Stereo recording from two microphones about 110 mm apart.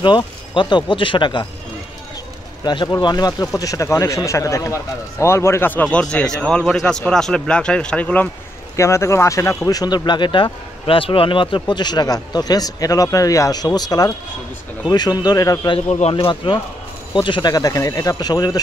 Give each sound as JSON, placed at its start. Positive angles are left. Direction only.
{"t": 0.0, "sound": "speech", "side_deg": 45}
{"t": 2.6, "sound": "speech", "side_deg": 40}
{"t": 8.7, "sound": "speech", "side_deg": 25}
{"t": 9.7, "sound": "speech", "side_deg": 35}
{"t": 15.9, "sound": "speech", "side_deg": 70}
{"t": 16.4, "sound": "speech", "side_deg": 50}